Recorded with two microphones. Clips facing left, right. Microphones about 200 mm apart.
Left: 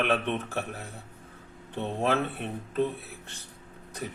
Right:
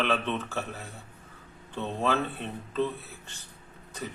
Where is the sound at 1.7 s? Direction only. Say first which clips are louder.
Left 1 dB; 15° left (ahead or behind).